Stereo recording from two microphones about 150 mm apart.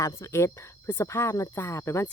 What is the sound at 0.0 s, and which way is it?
Speech, 20° left (ahead or behind).